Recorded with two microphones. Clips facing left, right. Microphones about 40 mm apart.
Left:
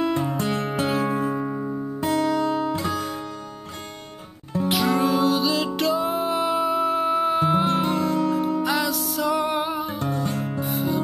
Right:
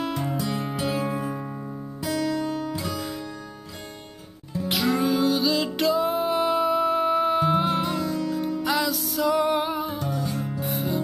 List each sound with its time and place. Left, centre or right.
0.4 s music: left
0.8 s music: left
1.3 s music: centre
2.0 s music: left
4.6 s music: centre
7.6 s music: left
8.6 s music: centre